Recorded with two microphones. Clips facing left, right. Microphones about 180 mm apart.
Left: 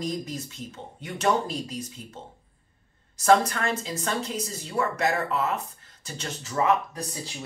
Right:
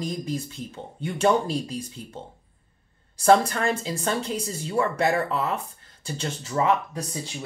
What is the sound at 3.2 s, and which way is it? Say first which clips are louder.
Speech: right 2 dB; 30° right (ahead or behind).